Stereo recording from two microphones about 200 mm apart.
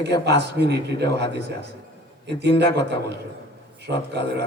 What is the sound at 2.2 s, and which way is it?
A man's voice, 60° right (ahead or behind).